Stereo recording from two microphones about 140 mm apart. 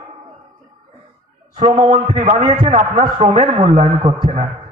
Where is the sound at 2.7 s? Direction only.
50° right (ahead or behind).